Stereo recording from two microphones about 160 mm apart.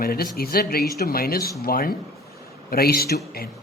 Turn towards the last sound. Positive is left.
turn(degrees=75)  # may be behind; listen again after turning